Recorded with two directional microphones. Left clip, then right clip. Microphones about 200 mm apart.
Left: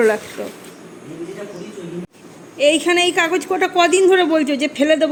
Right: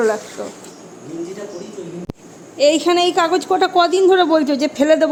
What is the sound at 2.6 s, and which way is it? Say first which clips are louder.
A man's voice: right 1 dB; 5° right (ahead or behind).